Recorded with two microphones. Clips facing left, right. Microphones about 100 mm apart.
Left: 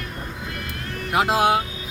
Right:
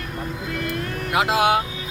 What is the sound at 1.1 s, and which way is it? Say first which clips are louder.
Speech: even; 40° left (ahead or behind).